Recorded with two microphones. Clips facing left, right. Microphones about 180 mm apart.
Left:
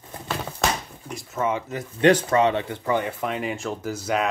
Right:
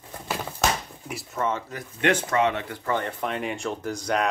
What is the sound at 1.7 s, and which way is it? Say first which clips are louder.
Speech: left 6 dB; 30° left (ahead or behind).